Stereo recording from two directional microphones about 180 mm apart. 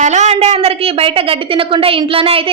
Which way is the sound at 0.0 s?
40° right (ahead or behind).